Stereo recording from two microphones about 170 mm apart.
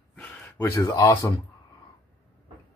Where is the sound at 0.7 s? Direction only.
20° left (ahead or behind).